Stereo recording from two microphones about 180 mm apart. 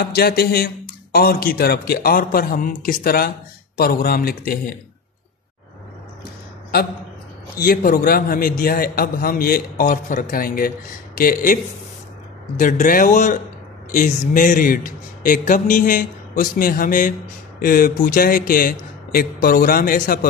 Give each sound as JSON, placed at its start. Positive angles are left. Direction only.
{"t": 0.0, "sound": "a man's voice", "side_deg": 60}
{"t": 7.5, "sound": "a man's voice", "side_deg": 50}